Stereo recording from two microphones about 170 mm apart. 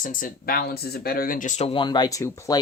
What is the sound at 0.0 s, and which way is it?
Speech, 55° left (ahead or behind).